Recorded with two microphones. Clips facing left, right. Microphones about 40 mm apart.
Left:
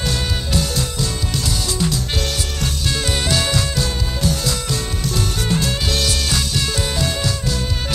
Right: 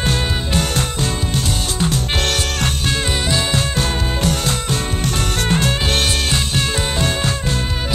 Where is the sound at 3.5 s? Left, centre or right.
Right.